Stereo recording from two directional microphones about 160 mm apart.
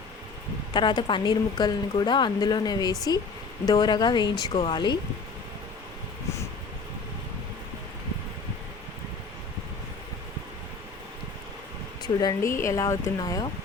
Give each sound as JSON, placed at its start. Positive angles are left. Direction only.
{"t": 0.7, "sound": "a woman's voice", "side_deg": 30}
{"t": 12.0, "sound": "a woman's voice", "side_deg": 25}